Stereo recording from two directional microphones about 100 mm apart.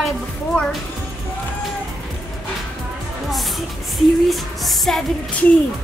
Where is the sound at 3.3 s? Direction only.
Centre (ahead or behind).